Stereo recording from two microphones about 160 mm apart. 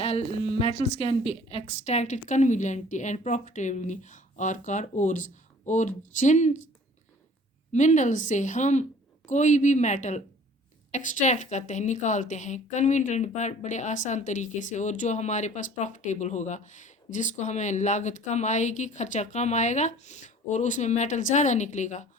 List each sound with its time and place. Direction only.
0.0 s a woman's voice: 40° left (ahead or behind)
7.7 s a woman's voice: 50° left (ahead or behind)